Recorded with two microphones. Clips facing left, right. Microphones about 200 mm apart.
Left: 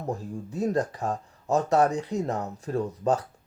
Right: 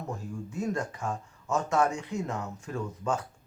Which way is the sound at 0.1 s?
35° left (ahead or behind).